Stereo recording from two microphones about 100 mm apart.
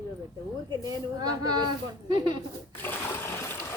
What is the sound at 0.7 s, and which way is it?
A woman's voice, 40° right (ahead or behind).